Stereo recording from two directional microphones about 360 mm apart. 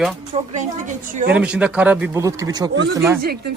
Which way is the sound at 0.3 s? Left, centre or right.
Centre.